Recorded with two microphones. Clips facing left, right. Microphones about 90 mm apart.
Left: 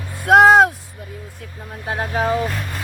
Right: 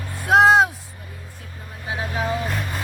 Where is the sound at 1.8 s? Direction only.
50° left (ahead or behind).